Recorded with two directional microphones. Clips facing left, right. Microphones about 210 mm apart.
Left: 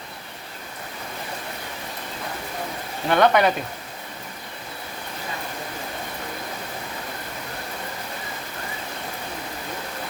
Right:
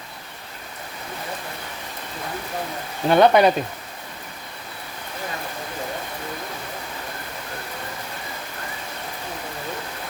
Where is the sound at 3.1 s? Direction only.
25° right (ahead or behind).